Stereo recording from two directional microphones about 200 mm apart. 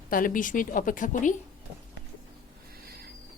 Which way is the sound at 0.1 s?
45° left (ahead or behind).